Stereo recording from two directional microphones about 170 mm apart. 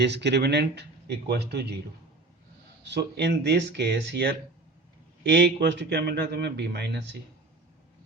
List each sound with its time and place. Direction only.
0.0 s a man's voice: 85° right
2.8 s speech: 90° right
5.3 s a man's voice: 90° right